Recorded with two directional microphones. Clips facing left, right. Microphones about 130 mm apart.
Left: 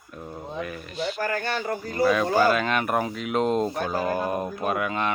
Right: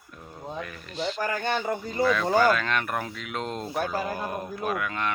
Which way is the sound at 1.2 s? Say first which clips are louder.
Right 1 dB; 20° right (ahead or behind).